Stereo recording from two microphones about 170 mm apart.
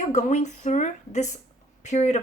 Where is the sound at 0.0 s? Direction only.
45° left (ahead or behind).